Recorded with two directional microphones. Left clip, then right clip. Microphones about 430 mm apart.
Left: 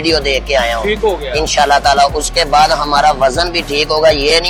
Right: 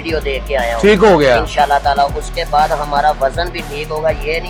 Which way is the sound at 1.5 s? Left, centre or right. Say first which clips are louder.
Left 3 dB; left.